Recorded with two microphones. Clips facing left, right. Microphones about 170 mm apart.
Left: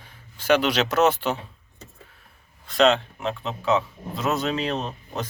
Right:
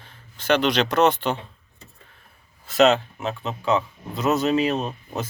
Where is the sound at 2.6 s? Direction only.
5° right (ahead or behind).